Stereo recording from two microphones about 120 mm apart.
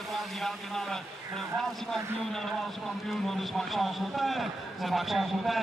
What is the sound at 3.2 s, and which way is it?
A man's voice, centre (ahead or behind).